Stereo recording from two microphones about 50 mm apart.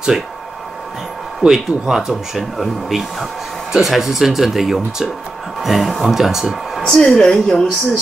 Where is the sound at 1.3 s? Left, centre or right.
Centre.